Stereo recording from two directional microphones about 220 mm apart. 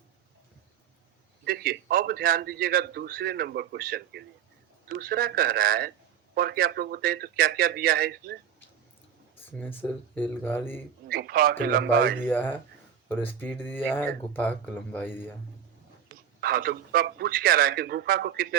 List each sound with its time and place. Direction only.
1.5 s a man's voice: 40° right (ahead or behind)
9.5 s speech: 10° left (ahead or behind)
11.1 s a man's voice: 45° right (ahead or behind)
12.2 s speech: 10° left (ahead or behind)
16.4 s a man's voice: 45° right (ahead or behind)